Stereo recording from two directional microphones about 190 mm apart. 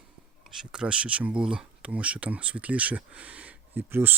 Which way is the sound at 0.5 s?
5° right (ahead or behind).